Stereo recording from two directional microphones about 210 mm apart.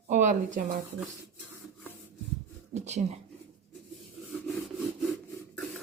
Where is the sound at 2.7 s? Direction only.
35° right (ahead or behind).